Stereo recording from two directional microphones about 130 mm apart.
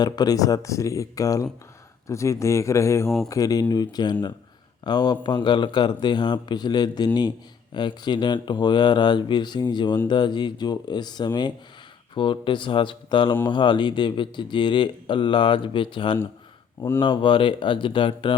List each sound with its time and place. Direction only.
0.0 s a man's voice: 30° left (ahead or behind)